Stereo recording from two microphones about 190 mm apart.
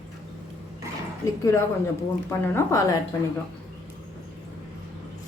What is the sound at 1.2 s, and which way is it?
Speech, 15° left (ahead or behind).